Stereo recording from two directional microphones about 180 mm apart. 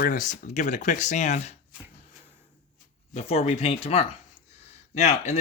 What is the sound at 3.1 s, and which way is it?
Speech, 35° left (ahead or behind).